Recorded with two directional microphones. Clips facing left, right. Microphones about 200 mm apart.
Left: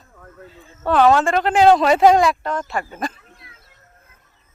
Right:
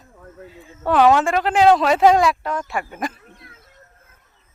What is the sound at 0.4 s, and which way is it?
A man's voice, 10° right (ahead or behind).